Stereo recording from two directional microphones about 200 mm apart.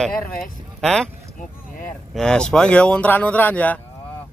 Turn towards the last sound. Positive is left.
turn(degrees=10)  # may be behind; listen again after turning